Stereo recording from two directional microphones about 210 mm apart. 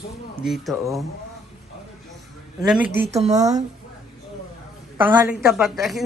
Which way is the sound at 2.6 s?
5° right (ahead or behind).